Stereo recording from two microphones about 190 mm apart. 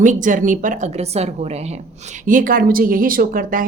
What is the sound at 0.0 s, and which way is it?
A woman's voice, 40° right (ahead or behind).